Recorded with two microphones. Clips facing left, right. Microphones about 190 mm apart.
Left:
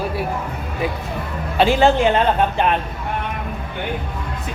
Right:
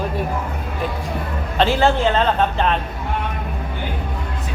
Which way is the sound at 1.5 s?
15° left (ahead or behind).